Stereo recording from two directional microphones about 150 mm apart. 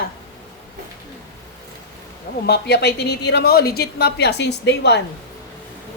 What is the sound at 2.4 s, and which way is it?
A woman's voice, 90° left.